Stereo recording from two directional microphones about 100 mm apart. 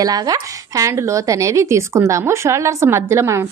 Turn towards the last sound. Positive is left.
turn(degrees=-30)  # may be behind; listen again after turning